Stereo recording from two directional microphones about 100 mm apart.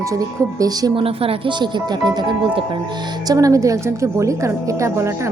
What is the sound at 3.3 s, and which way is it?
A woman's voice, 35° right (ahead or behind).